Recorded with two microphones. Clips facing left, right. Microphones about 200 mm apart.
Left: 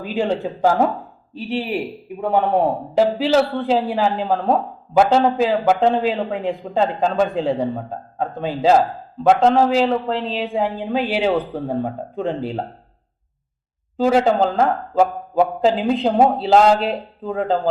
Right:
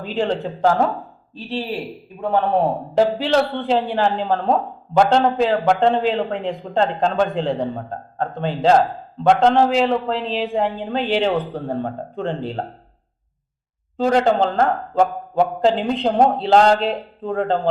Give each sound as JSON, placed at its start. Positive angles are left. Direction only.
{"t": 0.0, "sound": "a man's voice", "side_deg": 0}
{"t": 1.4, "sound": "speech", "side_deg": 15}
{"t": 2.9, "sound": "a man's voice", "side_deg": 5}
{"t": 14.0, "sound": "a man's voice", "side_deg": 5}